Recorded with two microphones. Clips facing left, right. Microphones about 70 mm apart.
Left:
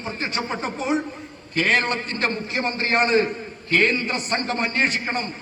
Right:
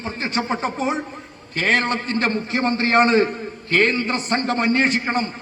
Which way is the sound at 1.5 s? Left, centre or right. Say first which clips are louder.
Right 1 dB; right.